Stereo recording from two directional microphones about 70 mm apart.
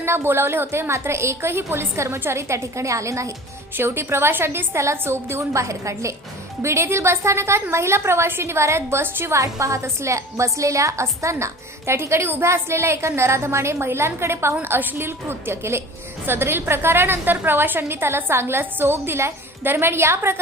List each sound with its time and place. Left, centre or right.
0.0 s a woman's voice: right
3.8 s a woman's voice: right
9.4 s a woman's voice: right